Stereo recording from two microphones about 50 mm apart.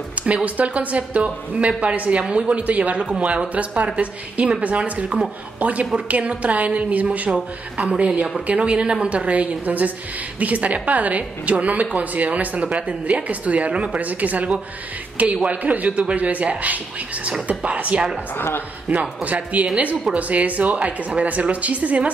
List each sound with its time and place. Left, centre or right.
0.2 s a woman's voice: centre
19.2 s a woman's voice: right